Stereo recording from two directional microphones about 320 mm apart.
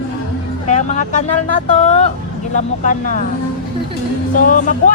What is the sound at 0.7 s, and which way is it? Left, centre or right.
Speech, left.